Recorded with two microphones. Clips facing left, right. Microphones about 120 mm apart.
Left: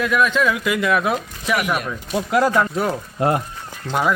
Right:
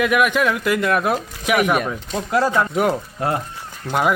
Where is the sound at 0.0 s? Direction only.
15° right (ahead or behind).